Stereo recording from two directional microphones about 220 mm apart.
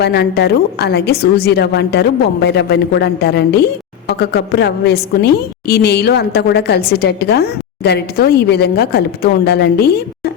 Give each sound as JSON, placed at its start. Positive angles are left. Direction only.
{"t": 0.0, "sound": "a woman's voice", "side_deg": 50}